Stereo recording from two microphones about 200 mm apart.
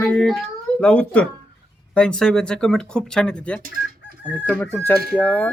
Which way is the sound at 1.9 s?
5° left (ahead or behind).